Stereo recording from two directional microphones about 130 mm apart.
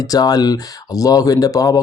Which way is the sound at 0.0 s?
30° left (ahead or behind).